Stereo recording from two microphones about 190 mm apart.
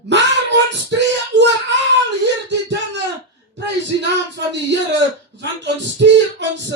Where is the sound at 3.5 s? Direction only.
65° right (ahead or behind).